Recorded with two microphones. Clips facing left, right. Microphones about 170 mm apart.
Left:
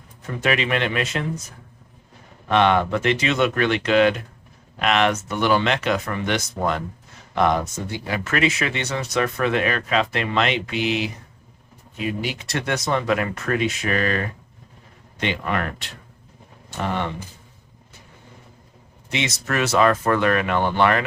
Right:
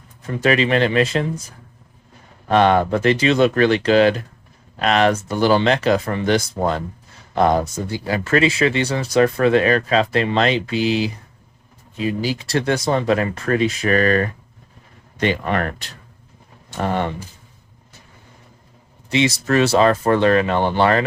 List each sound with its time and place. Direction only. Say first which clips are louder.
0.4 s speech: right 5 dB; 35° right (ahead or behind)
2.5 s speech: right 3 dB; 40° right (ahead or behind)
19.1 s speech: right 8 dB; 30° right (ahead or behind)